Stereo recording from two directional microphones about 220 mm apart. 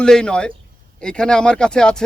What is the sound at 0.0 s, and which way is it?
Speech, 5° left (ahead or behind).